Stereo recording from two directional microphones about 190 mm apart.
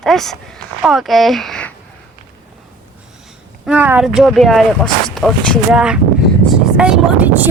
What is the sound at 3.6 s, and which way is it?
Speech, 10° right (ahead or behind).